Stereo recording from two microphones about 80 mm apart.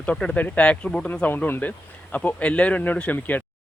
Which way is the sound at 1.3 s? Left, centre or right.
Left.